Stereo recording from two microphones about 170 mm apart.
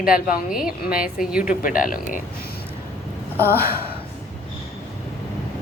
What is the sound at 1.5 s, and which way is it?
Speech, 55° left (ahead or behind).